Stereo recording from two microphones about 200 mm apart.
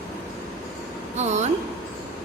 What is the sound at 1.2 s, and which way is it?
Speech, 35° right (ahead or behind).